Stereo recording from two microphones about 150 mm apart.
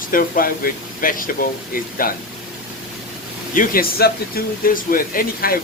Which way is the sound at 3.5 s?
70° left (ahead or behind).